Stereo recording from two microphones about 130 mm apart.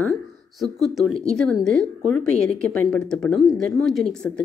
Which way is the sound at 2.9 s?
5° left (ahead or behind).